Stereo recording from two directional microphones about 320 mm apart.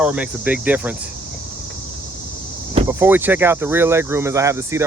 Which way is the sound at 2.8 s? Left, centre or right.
Centre.